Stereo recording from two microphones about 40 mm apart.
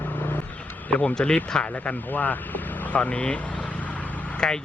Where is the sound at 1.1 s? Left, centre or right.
Centre.